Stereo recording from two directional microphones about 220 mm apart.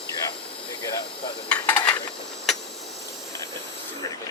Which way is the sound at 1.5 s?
5° left (ahead or behind).